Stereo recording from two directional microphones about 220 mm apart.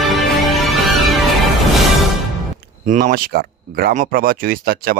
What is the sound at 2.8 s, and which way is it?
Speech, 40° right (ahead or behind).